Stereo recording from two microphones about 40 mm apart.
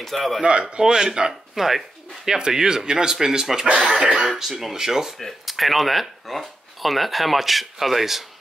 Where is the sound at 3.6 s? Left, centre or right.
Right.